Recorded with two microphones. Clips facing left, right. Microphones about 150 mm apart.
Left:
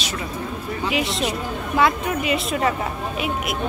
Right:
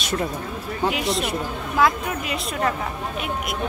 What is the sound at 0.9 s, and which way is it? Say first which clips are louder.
Speech: left 1 dB; centre (ahead or behind).